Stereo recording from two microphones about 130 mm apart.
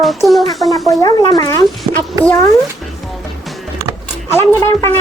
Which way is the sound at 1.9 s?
45° right (ahead or behind).